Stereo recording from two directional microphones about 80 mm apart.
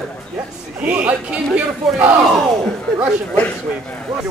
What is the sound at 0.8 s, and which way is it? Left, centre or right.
A man's voice, centre.